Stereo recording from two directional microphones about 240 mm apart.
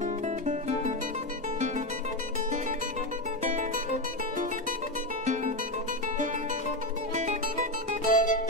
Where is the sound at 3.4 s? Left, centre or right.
Right.